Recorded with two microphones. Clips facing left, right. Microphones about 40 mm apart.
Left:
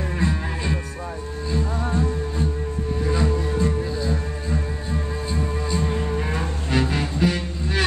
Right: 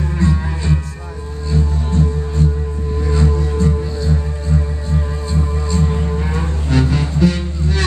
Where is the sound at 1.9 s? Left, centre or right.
Centre.